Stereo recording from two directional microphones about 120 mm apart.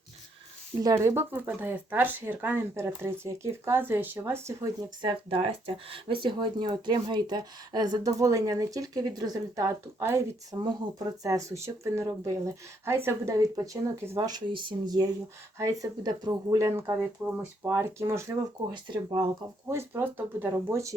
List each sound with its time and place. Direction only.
0.8 s speech: 25° right (ahead or behind)
5.3 s speech: 50° right (ahead or behind); by 18.3 s 25° right (ahead or behind)
18.7 s speech: 40° right (ahead or behind)
19.6 s speech: 20° right (ahead or behind)